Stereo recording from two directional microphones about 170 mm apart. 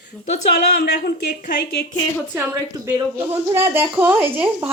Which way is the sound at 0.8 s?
65° left (ahead or behind).